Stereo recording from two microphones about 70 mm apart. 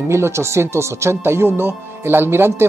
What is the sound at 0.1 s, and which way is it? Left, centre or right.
Speech, right.